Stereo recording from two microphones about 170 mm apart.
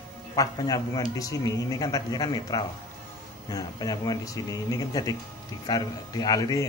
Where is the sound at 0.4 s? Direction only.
20° left (ahead or behind).